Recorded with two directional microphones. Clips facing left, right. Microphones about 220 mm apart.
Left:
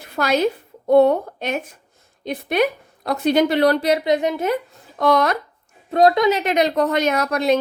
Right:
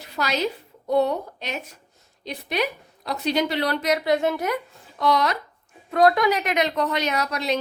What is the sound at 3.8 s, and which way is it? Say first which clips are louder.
Speech: left 3 dB; 30° left (ahead or behind).